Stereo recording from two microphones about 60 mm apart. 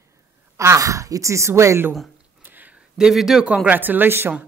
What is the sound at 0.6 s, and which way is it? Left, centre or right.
Speech, right.